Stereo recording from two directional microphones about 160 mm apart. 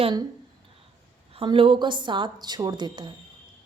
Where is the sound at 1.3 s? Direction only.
35° right (ahead or behind).